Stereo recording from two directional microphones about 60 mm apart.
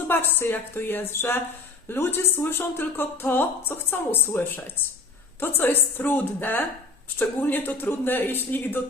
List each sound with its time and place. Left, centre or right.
0.1 s a woman's voice: left